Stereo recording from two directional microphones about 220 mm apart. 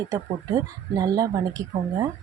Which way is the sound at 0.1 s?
15° right (ahead or behind).